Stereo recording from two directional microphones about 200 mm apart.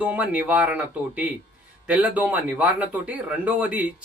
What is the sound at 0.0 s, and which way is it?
Speech, 5° right (ahead or behind).